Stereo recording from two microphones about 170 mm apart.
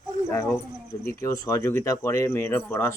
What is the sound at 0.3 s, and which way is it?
Speech, 20° left (ahead or behind).